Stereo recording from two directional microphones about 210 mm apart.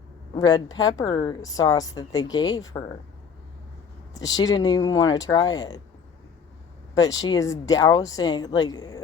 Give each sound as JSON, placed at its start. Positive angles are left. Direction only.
{"t": 0.3, "sound": "speech", "side_deg": 20}
{"t": 4.4, "sound": "speech", "side_deg": 20}
{"t": 6.9, "sound": "speech", "side_deg": 20}